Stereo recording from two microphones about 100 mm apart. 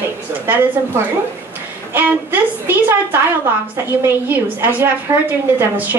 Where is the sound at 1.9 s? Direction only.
20° right (ahead or behind).